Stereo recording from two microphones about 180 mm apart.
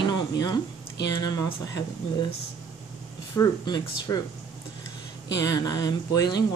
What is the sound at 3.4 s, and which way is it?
Speech, 20° left (ahead or behind).